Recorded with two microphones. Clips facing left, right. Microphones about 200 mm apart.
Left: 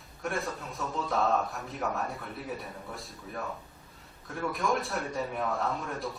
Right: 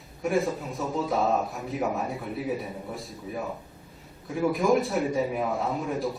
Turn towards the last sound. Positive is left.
turn(degrees=0)  # may be behind; listen again after turning